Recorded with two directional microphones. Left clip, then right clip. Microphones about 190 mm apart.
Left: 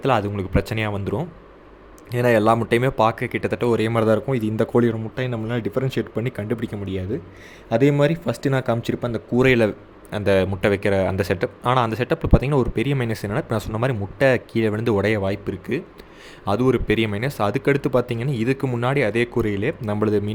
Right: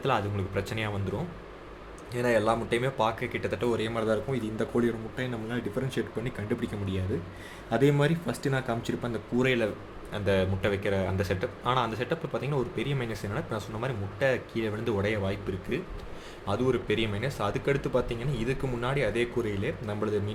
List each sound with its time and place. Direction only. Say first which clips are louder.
0.0 s speech: left 8 dB; 45° left (ahead or behind)